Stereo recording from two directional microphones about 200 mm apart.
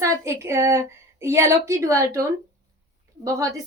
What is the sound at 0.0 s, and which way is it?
Speech, 15° right (ahead or behind).